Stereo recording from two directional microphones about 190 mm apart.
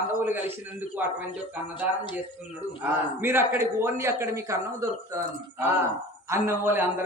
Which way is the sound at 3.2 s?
10° right (ahead or behind).